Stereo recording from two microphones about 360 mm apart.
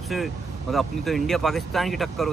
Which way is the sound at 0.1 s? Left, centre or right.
Centre.